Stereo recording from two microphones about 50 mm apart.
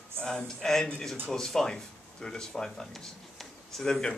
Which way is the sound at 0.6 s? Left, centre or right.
Centre.